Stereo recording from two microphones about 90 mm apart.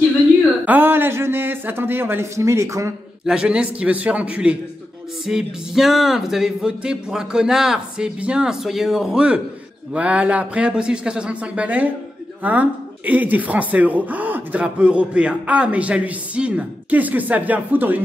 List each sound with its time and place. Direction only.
0.7 s speech: 20° right (ahead or behind)
3.3 s speech: 10° right (ahead or behind)
5.2 s music: 5° right (ahead or behind)
9.9 s speech: 15° right (ahead or behind)